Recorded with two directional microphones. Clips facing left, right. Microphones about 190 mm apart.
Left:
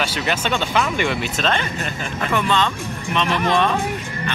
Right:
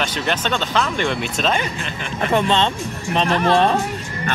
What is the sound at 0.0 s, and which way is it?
Speech, 10° left (ahead or behind).